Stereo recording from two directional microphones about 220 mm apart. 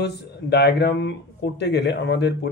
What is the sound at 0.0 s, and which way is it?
Speech, 50° left (ahead or behind).